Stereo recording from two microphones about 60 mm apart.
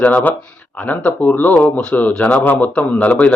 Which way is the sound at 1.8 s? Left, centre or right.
Left.